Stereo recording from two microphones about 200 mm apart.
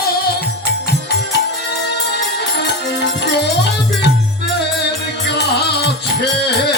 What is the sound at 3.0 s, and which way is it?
Music, 55° left (ahead or behind).